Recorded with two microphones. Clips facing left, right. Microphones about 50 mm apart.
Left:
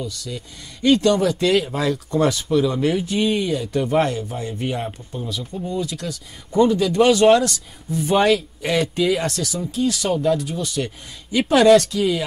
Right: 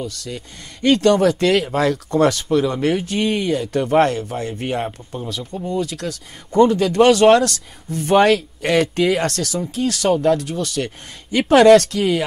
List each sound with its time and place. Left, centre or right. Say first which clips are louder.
0.0 s speech: right 1 dB; right